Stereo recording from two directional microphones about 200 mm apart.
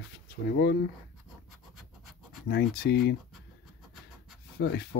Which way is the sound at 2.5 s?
50° left (ahead or behind).